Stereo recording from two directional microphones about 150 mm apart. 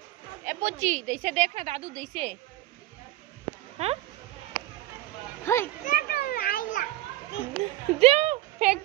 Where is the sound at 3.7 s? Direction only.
45° right (ahead or behind).